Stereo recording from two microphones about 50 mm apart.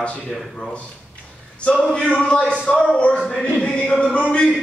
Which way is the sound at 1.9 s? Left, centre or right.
Left.